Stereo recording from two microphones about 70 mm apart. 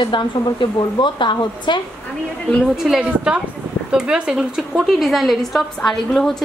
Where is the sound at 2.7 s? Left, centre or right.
Centre.